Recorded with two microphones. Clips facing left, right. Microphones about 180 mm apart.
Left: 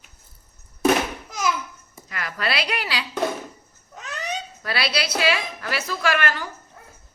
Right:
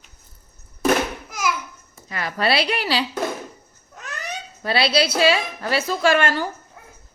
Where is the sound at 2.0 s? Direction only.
30° right (ahead or behind).